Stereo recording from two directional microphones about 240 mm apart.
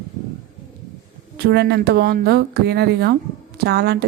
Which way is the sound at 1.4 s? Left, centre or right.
Right.